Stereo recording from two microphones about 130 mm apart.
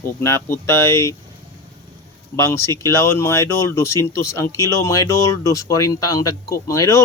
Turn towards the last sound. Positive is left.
turn(degrees=25)  # may be behind; listen again after turning